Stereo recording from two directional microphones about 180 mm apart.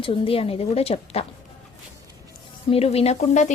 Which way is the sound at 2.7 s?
35° left (ahead or behind).